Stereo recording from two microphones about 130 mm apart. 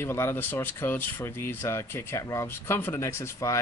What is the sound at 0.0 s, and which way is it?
Speech, 20° left (ahead or behind).